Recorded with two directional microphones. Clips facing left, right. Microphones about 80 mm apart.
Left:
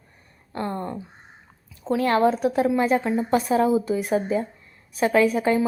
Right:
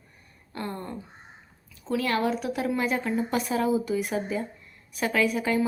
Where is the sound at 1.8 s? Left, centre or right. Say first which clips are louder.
Left 6 dB; left.